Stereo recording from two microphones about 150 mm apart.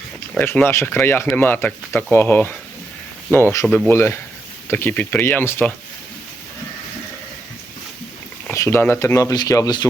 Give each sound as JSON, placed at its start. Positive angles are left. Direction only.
{"t": 0.3, "sound": "speech", "side_deg": 10}
{"t": 8.4, "sound": "speech", "side_deg": 15}